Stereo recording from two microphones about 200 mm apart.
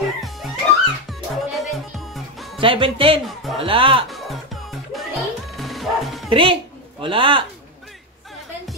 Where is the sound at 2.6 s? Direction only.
25° right (ahead or behind).